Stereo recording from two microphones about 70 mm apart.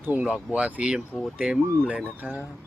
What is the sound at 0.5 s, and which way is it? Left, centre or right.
Speech, centre.